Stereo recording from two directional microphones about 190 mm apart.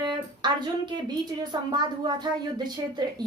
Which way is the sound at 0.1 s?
25° right (ahead or behind).